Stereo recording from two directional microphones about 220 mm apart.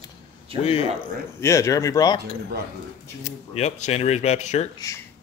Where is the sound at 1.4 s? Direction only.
15° left (ahead or behind).